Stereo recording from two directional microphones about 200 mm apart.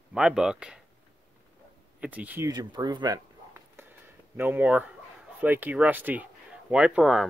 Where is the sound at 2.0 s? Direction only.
5° right (ahead or behind).